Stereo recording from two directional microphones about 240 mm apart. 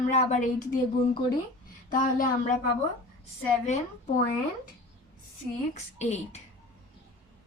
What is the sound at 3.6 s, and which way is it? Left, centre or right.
Speech, left.